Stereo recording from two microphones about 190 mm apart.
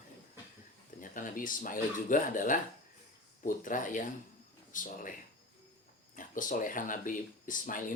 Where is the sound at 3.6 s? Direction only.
45° left (ahead or behind).